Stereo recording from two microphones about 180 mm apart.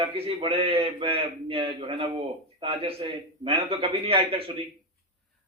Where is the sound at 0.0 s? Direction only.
30° right (ahead or behind).